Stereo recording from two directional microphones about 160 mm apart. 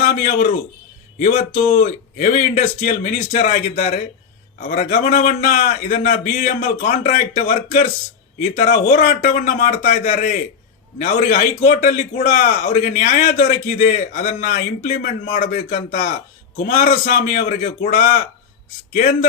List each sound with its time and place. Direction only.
1.2 s a man's voice: 55° left (ahead or behind)